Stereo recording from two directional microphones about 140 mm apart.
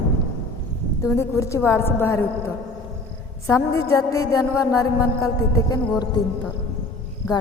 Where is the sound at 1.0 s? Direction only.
20° left (ahead or behind).